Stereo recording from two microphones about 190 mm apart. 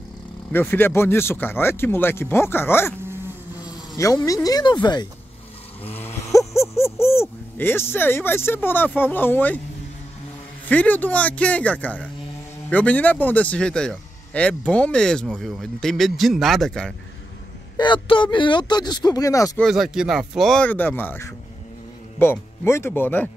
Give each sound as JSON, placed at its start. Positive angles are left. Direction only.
{"t": 0.5, "sound": "speech", "side_deg": 10}
{"t": 5.9, "sound": "speech", "side_deg": 10}
{"t": 10.7, "sound": "speech", "side_deg": 10}
{"t": 17.7, "sound": "speech", "side_deg": 25}
{"t": 19.6, "sound": "speech", "side_deg": 0}